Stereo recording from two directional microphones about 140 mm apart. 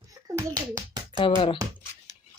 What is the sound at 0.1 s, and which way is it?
Hands, 25° right (ahead or behind).